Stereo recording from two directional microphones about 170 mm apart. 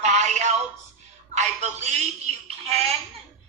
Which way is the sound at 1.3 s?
40° right (ahead or behind).